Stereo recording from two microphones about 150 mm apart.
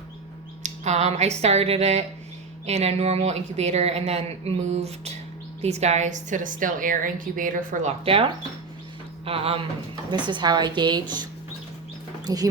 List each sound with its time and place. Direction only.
0.6 s a woman's voice: 50° right (ahead or behind)
8.0 s speech: 40° right (ahead or behind)
12.2 s speech: 25° right (ahead or behind)